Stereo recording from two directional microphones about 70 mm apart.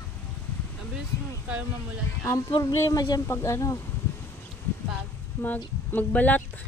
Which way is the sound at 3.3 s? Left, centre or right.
Left.